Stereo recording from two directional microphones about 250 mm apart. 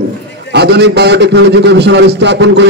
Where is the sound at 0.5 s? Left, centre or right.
Right.